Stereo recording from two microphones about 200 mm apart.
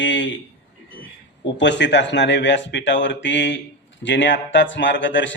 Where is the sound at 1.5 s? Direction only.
60° left (ahead or behind).